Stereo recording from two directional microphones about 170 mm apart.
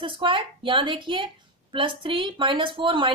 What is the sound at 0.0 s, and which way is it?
A woman's voice, 30° right (ahead or behind).